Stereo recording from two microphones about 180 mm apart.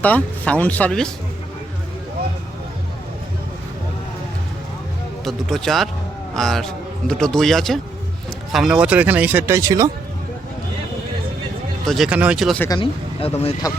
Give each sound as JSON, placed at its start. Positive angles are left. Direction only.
{"t": 0.0, "sound": "speech", "side_deg": 10}
{"t": 5.2, "sound": "a man's voice", "side_deg": 0}
{"t": 11.9, "sound": "a man's voice", "side_deg": -5}
{"t": 12.5, "sound": "speech", "side_deg": 15}
{"t": 12.8, "sound": "speech", "side_deg": 30}